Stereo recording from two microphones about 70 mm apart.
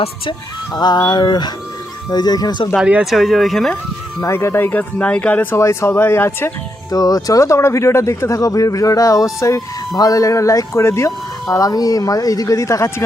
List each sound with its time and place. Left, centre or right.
0.7 s speech: left
2.0 s speech: left
3.0 s speech: centre
4.2 s speech: left; by 5.5 s centre
5.5 s speech: left
6.9 s speech: left
9.9 s speech: left